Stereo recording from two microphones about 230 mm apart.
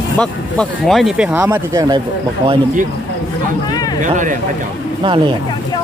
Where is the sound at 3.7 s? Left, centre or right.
Centre.